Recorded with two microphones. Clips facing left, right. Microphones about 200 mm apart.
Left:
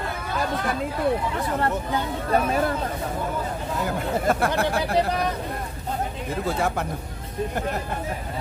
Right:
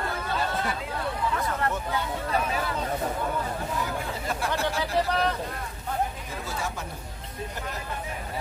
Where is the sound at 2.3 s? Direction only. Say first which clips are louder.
Left 8 dB; 45° left (ahead or behind).